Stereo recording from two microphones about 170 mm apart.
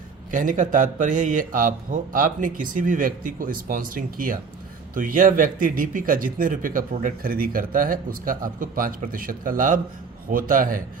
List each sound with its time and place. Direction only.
0.3 s a man's voice: 50° right (ahead or behind)